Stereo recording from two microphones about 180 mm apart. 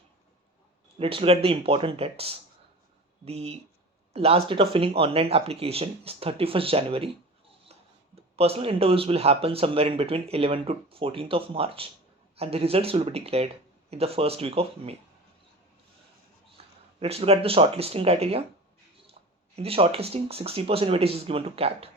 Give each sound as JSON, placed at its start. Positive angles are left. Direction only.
{"t": 0.9, "sound": "speech", "side_deg": -30}
{"t": 16.6, "sound": "a sound", "side_deg": -35}
{"t": 17.0, "sound": "speech", "side_deg": -35}
{"t": 19.5, "sound": "speech", "side_deg": -30}